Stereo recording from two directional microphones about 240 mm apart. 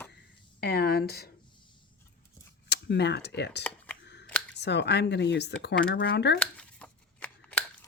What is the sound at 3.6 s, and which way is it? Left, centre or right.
Speech, centre.